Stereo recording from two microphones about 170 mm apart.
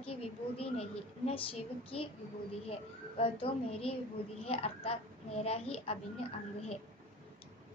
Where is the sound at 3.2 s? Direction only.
35° left (ahead or behind).